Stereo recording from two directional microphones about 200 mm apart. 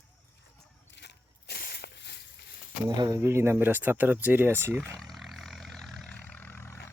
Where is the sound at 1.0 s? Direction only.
55° left (ahead or behind).